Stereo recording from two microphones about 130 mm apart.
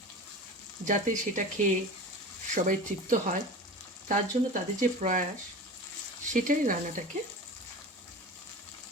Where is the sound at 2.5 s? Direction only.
85° right.